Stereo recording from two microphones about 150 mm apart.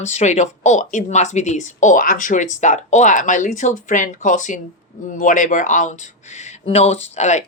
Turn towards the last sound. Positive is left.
turn(degrees=50)  # may be behind; listen again after turning